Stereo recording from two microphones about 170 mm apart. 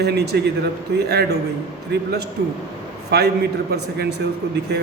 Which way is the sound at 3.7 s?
75° right (ahead or behind).